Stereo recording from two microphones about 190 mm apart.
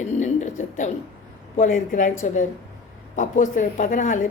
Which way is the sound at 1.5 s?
40° left (ahead or behind).